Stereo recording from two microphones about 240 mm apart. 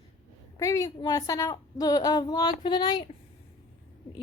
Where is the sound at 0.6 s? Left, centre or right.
Centre.